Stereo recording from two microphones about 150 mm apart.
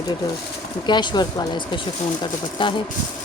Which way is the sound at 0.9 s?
30° left (ahead or behind).